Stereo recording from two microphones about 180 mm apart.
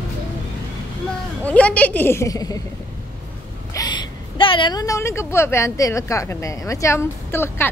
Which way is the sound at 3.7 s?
25° left (ahead or behind).